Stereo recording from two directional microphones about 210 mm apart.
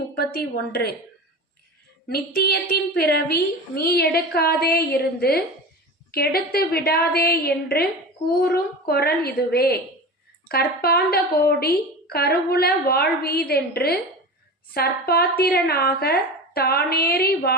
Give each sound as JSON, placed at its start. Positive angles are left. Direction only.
{"t": 0.2, "sound": "a woman's voice", "side_deg": 50}
{"t": 2.0, "sound": "a woman's voice", "side_deg": 45}